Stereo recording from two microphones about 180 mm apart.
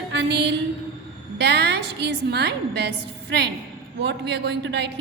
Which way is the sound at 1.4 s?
70° right (ahead or behind).